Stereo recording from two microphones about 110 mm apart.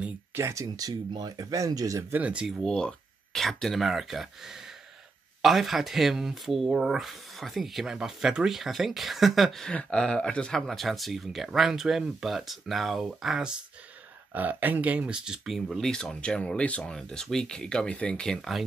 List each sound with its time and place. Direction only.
0.3 s speech: 25° right (ahead or behind)
2.1 s speech: 10° right (ahead or behind)
14.3 s speech: 15° right (ahead or behind); by 18.6 s 5° left (ahead or behind)